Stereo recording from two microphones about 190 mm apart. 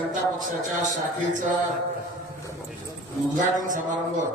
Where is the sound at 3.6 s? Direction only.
45° right (ahead or behind).